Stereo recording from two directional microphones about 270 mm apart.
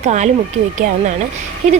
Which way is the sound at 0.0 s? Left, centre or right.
Right.